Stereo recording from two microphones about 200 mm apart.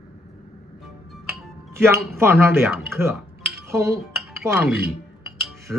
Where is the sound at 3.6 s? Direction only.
15° right (ahead or behind).